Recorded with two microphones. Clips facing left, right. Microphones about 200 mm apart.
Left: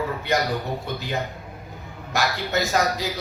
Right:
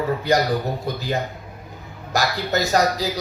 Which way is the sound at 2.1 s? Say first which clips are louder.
Right 3 dB; 35° right (ahead or behind).